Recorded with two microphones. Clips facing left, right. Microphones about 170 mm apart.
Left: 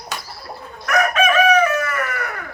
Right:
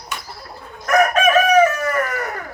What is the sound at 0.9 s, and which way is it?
Chicken, 45° right (ahead or behind).